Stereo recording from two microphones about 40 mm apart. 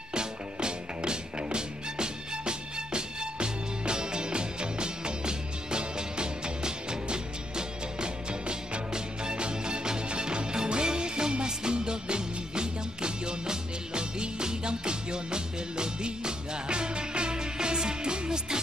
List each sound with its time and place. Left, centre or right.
0.1 s music: right